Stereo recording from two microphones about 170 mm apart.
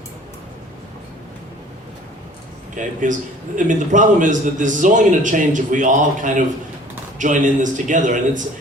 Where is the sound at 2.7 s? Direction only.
50° right (ahead or behind).